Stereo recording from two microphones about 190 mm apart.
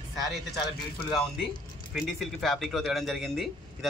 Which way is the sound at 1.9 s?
Centre (ahead or behind).